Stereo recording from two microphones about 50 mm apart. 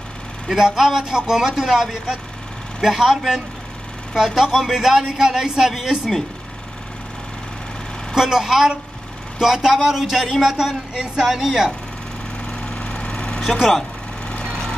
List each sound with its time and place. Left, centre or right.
0.5 s speech: centre
4.6 s speech: centre
8.1 s speech: centre
12.4 s a sound: centre
13.4 s speech: centre
14.2 s vehicle: left